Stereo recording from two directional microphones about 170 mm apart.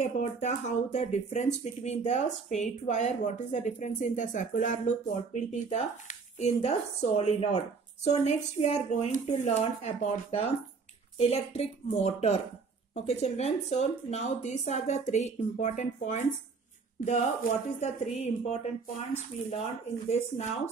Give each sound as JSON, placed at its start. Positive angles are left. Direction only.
{"t": 0.0, "sound": "speech", "side_deg": 45}